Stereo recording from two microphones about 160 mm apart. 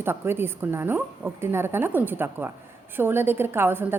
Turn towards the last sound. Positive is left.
turn(degrees=-15)  # may be behind; listen again after turning